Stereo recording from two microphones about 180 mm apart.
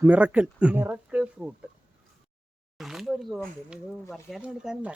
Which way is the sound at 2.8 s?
Centre (ahead or behind).